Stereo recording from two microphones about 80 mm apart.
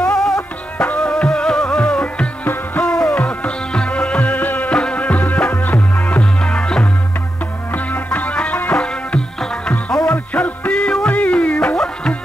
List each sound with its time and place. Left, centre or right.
0.0 s music: centre